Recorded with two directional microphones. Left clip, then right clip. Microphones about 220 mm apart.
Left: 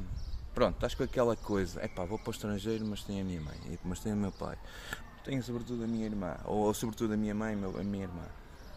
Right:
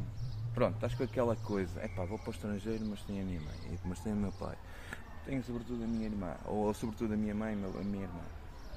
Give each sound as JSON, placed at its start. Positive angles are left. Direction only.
{"t": 0.6, "sound": "speech", "side_deg": 55}